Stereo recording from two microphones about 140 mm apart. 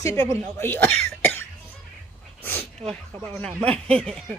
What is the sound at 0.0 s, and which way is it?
Speech, 20° left (ahead or behind).